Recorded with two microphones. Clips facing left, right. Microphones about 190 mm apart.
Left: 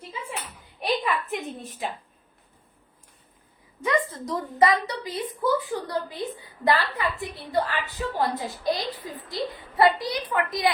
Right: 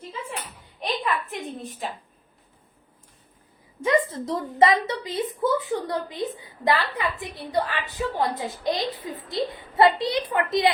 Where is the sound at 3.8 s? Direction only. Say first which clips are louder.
Right 3 dB; 25° right (ahead or behind).